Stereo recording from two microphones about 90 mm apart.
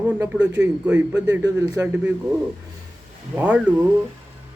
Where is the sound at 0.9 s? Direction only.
15° right (ahead or behind).